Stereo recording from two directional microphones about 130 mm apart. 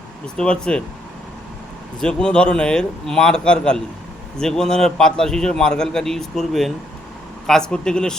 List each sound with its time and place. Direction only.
0.3 s a man's voice: 5° left (ahead or behind)
2.0 s a man's voice: 5° left (ahead or behind)